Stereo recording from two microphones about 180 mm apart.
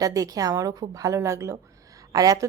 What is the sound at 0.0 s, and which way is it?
A woman's voice, 20° right (ahead or behind).